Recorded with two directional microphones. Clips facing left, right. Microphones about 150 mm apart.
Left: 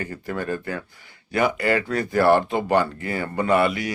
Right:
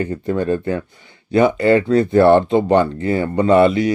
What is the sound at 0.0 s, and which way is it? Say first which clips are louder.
Speech: right 9 dB; 25° right (ahead or behind).